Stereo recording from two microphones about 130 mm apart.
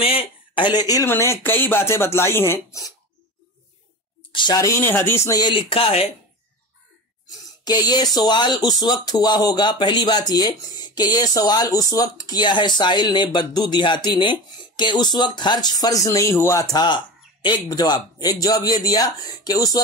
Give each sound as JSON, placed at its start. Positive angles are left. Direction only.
{"t": 0.0, "sound": "speech", "side_deg": 45}
{"t": 1.0, "sound": "speech", "side_deg": 20}
{"t": 4.3, "sound": "speech", "side_deg": 35}
{"t": 4.8, "sound": "speech", "side_deg": 15}
{"t": 5.4, "sound": "speech", "side_deg": 35}
{"t": 7.6, "sound": "speech", "side_deg": 30}